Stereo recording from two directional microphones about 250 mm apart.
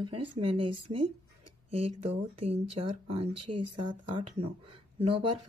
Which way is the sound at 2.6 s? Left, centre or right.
Right.